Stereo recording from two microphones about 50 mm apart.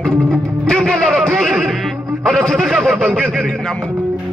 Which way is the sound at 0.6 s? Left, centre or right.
Centre.